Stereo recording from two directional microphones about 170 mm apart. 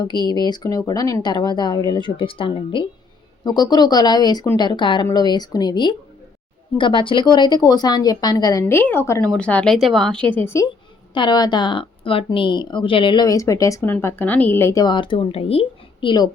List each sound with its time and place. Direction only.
0.0 s speech: 25° left (ahead or behind)
8.6 s a woman's voice: 10° left (ahead or behind)
11.1 s speech: 25° left (ahead or behind)